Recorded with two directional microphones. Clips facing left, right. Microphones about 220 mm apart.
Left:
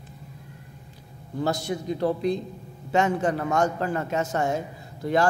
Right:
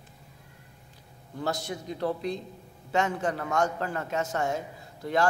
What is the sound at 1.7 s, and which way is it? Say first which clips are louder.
Speech: left 7 dB; 15° left (ahead or behind).